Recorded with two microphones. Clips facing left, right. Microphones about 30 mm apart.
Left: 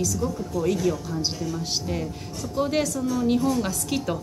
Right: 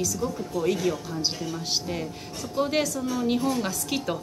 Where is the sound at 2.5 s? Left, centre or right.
Centre.